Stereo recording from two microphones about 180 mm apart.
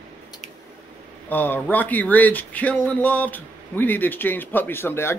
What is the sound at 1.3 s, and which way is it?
Speech, 10° left (ahead or behind).